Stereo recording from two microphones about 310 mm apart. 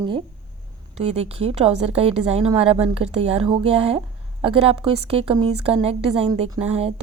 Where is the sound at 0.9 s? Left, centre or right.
Centre.